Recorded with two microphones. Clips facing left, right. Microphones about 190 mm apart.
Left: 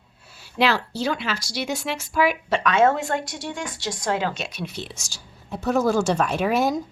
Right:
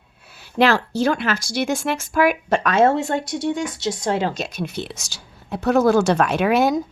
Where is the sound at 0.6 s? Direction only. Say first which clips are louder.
Right 5 dB; 50° right (ahead or behind); by 4.4 s 30° right (ahead or behind).